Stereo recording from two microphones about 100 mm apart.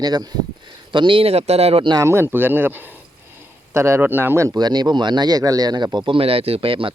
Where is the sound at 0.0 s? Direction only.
40° right (ahead or behind).